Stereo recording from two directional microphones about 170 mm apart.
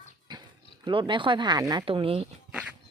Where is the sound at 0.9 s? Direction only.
30° right (ahead or behind).